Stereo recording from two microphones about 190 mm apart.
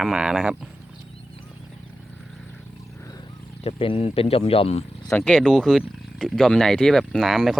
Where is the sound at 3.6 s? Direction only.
30° left (ahead or behind).